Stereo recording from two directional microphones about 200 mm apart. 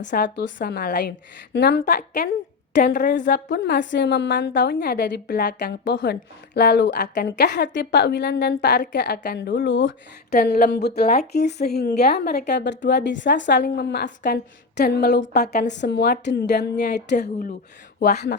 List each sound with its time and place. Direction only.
0.1 s a woman's voice: 45° left (ahead or behind)
3.0 s a woman's voice: 55° left (ahead or behind)
3.9 s a woman's voice: 60° left (ahead or behind)
10.3 s a woman's voice: 50° left (ahead or behind)